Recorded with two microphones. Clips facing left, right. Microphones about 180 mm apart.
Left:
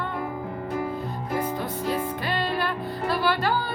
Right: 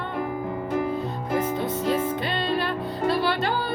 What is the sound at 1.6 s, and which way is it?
Music, 25° right (ahead or behind).